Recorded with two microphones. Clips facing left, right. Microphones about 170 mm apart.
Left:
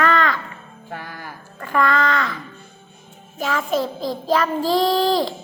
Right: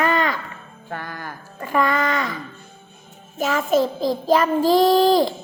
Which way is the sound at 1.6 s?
20° right (ahead or behind).